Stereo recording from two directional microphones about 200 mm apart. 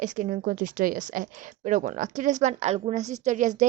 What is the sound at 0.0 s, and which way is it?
Speech, 40° right (ahead or behind).